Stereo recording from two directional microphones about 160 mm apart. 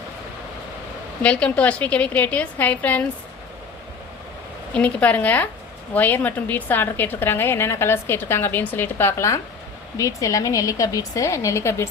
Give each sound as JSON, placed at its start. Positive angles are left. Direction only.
{"t": 1.2, "sound": "a woman's voice", "side_deg": 5}
{"t": 4.7, "sound": "a woman's voice", "side_deg": 10}